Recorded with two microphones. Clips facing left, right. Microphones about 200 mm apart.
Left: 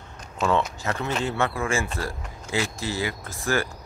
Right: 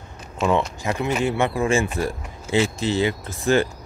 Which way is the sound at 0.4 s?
15° right (ahead or behind).